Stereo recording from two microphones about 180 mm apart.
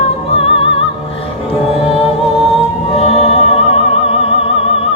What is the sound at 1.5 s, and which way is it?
Music, 30° left (ahead or behind).